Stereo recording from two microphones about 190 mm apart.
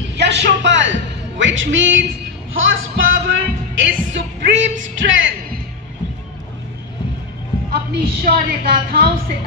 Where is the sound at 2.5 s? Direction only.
90° right.